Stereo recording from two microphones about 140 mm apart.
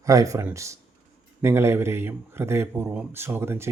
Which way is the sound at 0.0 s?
25° right (ahead or behind).